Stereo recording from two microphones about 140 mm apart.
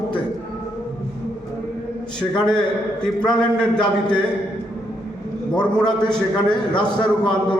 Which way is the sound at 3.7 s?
5° left (ahead or behind).